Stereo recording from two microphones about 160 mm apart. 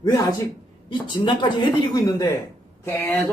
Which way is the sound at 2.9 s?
10° left (ahead or behind).